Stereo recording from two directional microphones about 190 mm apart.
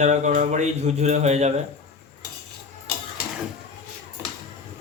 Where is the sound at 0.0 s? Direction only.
40° right (ahead or behind).